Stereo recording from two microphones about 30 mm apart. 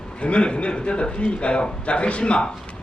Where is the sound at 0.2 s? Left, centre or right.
Left.